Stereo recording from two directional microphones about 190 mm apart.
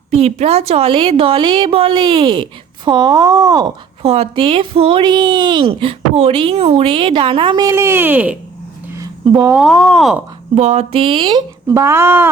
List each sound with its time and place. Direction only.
0.1 s a woman's voice: 35° right (ahead or behind); by 3.7 s 20° right (ahead or behind)
4.0 s a woman's voice: 35° right (ahead or behind); by 8.4 s 10° right (ahead or behind)
9.0 s a sound: 20° right (ahead or behind)
9.6 s speech: centre (ahead or behind)
10.5 s a woman's voice: 35° right (ahead or behind); by 12.3 s 10° right (ahead or behind)